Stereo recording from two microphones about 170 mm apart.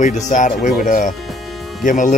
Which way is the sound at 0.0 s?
45° left (ahead or behind).